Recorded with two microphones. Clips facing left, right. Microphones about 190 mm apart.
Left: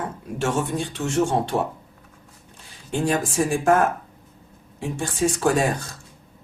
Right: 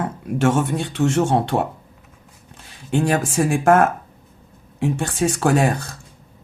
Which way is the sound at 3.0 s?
65° right (ahead or behind).